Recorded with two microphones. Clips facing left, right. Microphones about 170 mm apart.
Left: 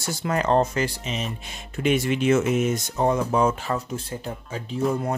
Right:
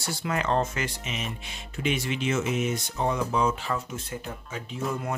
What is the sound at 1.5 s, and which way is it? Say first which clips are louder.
Speech: left 7 dB; 50° left (ahead or behind).